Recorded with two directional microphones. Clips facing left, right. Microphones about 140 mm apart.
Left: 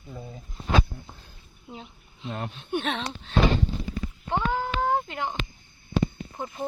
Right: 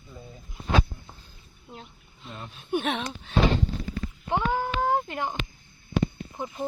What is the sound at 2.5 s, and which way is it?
Speech, 5° right (ahead or behind).